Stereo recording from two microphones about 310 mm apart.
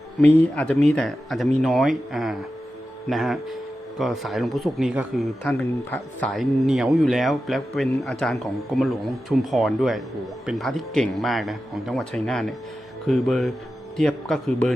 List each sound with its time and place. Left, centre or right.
0.2 s speech: centre